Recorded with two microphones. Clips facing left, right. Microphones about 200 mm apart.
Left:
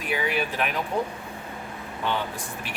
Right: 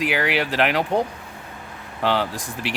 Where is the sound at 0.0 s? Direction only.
85° right.